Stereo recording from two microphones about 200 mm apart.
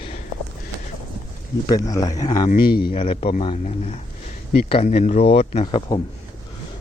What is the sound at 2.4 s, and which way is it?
Speech, 50° left (ahead or behind).